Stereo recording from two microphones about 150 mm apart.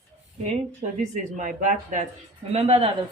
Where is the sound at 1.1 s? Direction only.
55° right (ahead or behind).